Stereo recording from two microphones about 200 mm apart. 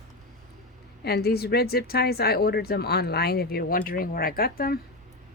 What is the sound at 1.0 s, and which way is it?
Speech, 55° left (ahead or behind).